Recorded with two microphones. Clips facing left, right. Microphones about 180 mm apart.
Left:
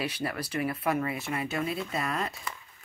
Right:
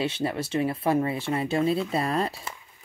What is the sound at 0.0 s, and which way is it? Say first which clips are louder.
Speech: right 5 dB; 25° right (ahead or behind).